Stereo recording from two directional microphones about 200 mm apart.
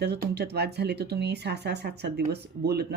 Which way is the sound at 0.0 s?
55° right (ahead or behind).